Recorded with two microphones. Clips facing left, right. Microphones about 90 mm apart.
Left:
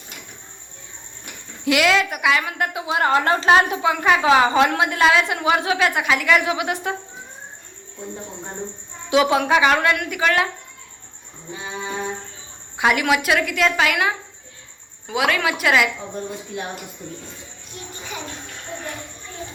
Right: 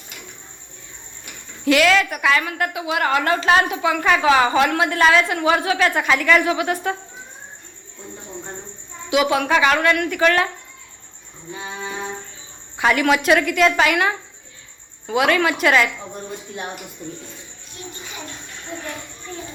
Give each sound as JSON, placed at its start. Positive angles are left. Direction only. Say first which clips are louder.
{"t": 1.6, "sound": "a woman's voice", "louder": "right 2 dB", "side_deg": 15}
{"t": 9.0, "sound": "speech", "louder": "left 1 dB", "side_deg": 30}
{"t": 12.7, "sound": "a woman's voice", "louder": "right 1 dB", "side_deg": 15}